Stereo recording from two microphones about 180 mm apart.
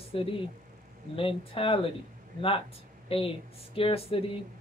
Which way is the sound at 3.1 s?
30° left (ahead or behind).